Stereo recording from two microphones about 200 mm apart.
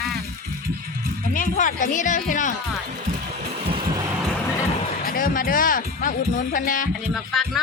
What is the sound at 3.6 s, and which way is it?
Vehicle, 25° right (ahead or behind).